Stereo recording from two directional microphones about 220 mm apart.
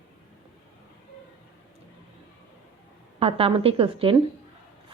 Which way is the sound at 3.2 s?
25° right (ahead or behind).